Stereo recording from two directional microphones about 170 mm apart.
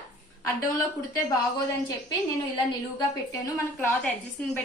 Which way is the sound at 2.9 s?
20° left (ahead or behind).